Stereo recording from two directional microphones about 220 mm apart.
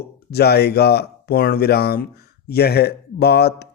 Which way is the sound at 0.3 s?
45° left (ahead or behind).